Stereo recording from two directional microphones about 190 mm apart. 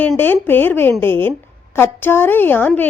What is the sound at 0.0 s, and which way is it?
A woman's voice, 10° left (ahead or behind).